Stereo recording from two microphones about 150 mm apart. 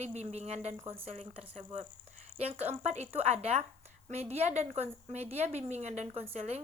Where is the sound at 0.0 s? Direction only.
50° right (ahead or behind).